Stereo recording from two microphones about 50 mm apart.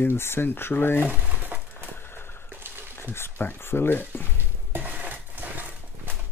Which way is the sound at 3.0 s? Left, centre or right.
Left.